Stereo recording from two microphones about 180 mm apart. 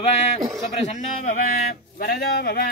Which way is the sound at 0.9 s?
45° left (ahead or behind).